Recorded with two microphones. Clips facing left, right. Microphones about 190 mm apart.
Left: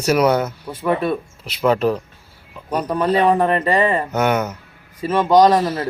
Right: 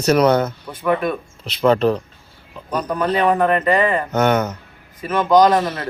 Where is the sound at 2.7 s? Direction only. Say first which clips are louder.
Left 2 dB; 30° left (ahead or behind).